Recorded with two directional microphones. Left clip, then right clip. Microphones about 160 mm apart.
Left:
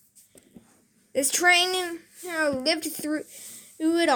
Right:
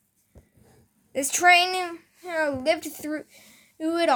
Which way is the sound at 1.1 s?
20° right (ahead or behind).